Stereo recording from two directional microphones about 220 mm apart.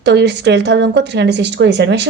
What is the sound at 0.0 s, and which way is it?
A woman's voice, 50° right (ahead or behind).